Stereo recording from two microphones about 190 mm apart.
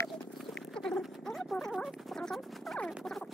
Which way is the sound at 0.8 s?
5° left (ahead or behind).